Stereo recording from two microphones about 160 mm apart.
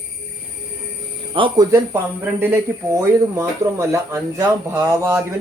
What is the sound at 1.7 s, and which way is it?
Speech, 15° right (ahead or behind).